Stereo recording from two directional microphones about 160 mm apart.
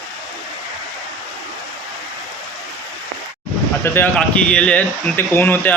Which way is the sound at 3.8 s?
15° left (ahead or behind).